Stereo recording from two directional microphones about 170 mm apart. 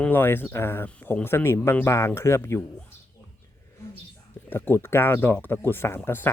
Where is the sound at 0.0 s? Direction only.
10° left (ahead or behind).